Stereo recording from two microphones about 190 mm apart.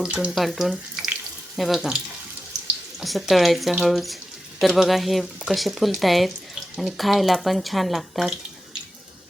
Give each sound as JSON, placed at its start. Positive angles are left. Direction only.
{"t": 0.0, "sound": "speech", "side_deg": -5}
{"t": 3.0, "sound": "speech", "side_deg": 0}